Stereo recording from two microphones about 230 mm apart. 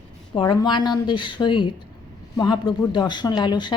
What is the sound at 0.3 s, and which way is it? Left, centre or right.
A woman's voice, centre.